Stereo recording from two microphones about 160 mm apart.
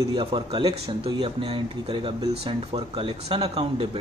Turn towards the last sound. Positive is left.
turn(degrees=-35)  # may be behind; listen again after turning